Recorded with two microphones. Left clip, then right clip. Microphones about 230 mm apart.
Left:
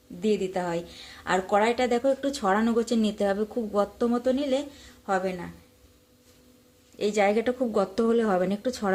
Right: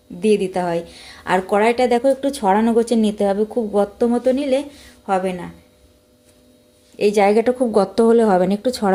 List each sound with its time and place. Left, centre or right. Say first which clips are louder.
0.2 s a woman's voice: right 9 dB; right
7.0 s a woman's voice: right 9 dB; right